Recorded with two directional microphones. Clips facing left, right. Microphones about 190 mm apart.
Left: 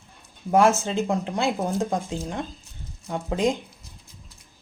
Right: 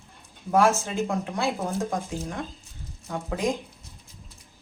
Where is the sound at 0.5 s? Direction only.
20° left (ahead or behind).